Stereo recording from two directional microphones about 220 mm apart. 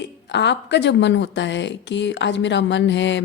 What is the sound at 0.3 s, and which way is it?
A woman's voice, 50° left (ahead or behind).